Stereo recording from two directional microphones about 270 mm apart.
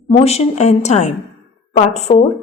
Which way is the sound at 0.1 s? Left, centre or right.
Left.